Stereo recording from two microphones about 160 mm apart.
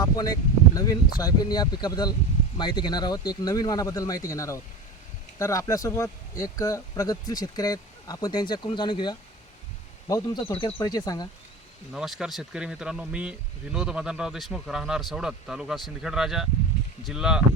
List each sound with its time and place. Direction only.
0.0 s a sound: 25° left (ahead or behind)
0.8 s a man's voice: 25° left (ahead or behind)
11.9 s speech: 5° right (ahead or behind)